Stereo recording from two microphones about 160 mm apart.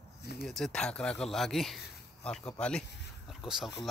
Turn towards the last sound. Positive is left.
turn(degrees=0)  # may be behind; listen again after turning